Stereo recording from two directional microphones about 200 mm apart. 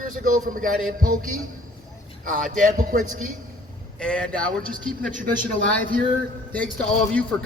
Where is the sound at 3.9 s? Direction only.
5° left (ahead or behind).